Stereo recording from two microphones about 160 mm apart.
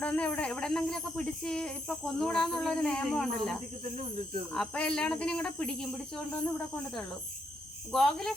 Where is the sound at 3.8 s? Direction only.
45° right (ahead or behind).